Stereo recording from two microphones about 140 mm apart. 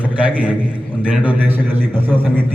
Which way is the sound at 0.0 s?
10° right (ahead or behind).